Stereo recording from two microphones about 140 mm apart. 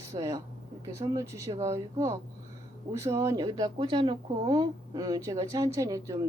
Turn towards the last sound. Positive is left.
turn(degrees=-25)  # may be behind; listen again after turning